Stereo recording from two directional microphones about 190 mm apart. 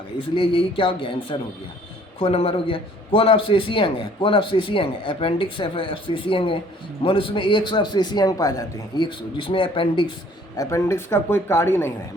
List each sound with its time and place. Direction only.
0.3 s a man's voice: 25° left (ahead or behind)
10.6 s speech: 15° left (ahead or behind)